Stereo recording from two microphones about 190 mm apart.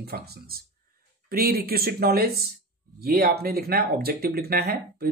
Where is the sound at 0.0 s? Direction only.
55° right (ahead or behind).